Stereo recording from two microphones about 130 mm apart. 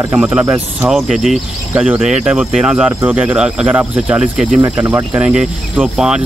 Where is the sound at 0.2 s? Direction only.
10° right (ahead or behind).